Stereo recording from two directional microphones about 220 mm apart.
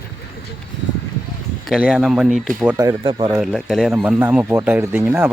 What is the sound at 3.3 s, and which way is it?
Speech, centre (ahead or behind).